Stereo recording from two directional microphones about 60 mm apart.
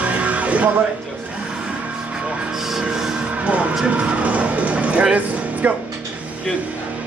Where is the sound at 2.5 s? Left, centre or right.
Centre.